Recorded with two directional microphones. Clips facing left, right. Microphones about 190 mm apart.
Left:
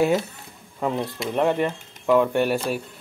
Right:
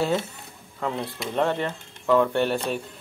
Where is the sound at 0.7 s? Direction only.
15° left (ahead or behind).